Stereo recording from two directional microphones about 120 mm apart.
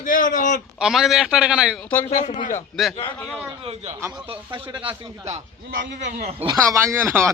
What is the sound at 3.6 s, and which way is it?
Speech, 65° right (ahead or behind).